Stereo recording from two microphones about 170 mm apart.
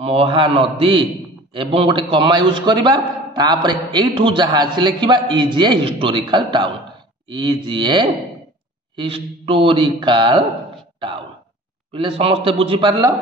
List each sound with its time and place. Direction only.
0.0 s a man's voice: 35° right (ahead or behind)
11.9 s a man's voice: 30° right (ahead or behind)